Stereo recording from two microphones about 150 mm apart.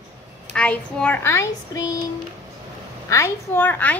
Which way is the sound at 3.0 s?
20° left (ahead or behind).